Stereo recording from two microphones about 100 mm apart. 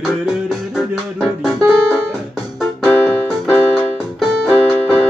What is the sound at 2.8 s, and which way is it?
Music, 20° left (ahead or behind).